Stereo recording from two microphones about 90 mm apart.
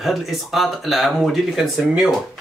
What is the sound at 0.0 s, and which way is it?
Speech, centre (ahead or behind).